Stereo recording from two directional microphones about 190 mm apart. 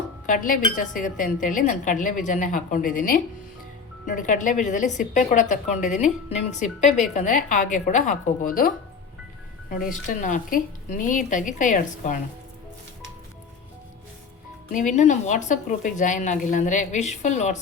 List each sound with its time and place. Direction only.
0.3 s a woman's voice: 45° left (ahead or behind)
14.9 s a woman's voice: 40° left (ahead or behind)